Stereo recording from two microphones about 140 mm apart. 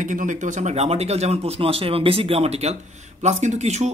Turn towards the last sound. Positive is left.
turn(degrees=-55)  # may be behind; listen again after turning